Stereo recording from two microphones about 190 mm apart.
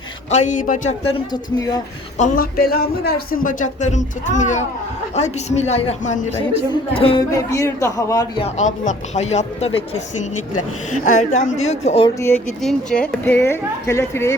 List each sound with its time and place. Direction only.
0.3 s speech: 40° left (ahead or behind); by 1.8 s 20° left (ahead or behind)
2.1 s speech: 45° left (ahead or behind); by 7.3 s 30° left (ahead or behind)
7.5 s a woman's voice: 15° left (ahead or behind)
8.4 s speech: 35° left (ahead or behind)
11.2 s speech: 40° left (ahead or behind)
12.0 s a woman's voice: 15° left (ahead or behind)